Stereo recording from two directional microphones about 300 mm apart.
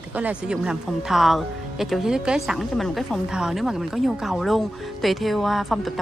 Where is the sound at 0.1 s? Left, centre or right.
Centre.